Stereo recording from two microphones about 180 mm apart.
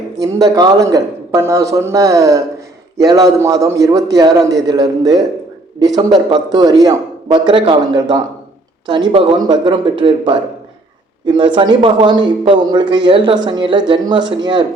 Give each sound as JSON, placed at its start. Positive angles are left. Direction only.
{"t": 0.5, "sound": "a man's voice", "side_deg": -20}
{"t": 11.3, "sound": "a man's voice", "side_deg": -25}